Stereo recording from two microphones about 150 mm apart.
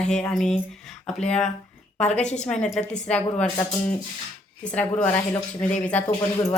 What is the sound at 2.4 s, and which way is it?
A woman's voice, 5° left (ahead or behind).